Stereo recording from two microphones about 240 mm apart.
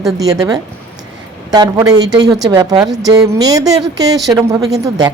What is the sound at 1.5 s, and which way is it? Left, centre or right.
A woman's voice, centre.